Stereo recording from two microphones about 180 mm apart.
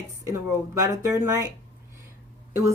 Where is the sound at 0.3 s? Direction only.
15° right (ahead or behind).